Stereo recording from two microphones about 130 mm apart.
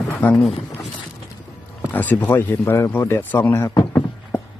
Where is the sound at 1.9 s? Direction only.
15° left (ahead or behind).